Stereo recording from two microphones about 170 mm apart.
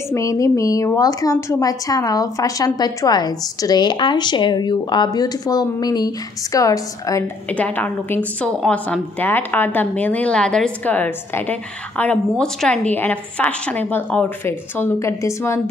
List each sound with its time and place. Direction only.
0.1 s a woman's voice: 20° left (ahead or behind)
7.5 s a woman's voice: 10° left (ahead or behind)